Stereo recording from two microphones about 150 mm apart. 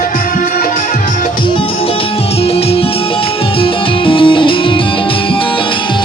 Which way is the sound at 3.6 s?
35° left (ahead or behind).